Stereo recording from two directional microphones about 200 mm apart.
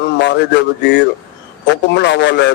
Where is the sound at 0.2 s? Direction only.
60° left (ahead or behind).